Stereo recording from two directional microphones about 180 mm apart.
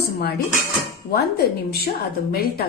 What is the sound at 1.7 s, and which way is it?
Speech, 60° left (ahead or behind).